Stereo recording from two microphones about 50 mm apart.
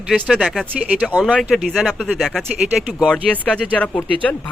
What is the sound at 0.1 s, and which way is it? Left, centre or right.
Speech, centre.